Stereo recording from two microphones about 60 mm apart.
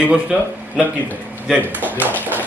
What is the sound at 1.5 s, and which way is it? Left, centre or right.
Speech, right.